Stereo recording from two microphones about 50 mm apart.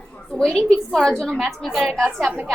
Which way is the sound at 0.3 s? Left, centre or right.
Centre.